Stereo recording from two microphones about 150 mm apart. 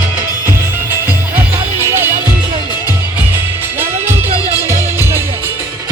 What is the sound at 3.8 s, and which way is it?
Music, 15° right (ahead or behind).